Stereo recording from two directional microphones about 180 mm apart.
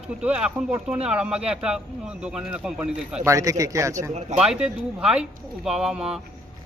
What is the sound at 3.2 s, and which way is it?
Speech, 20° right (ahead or behind).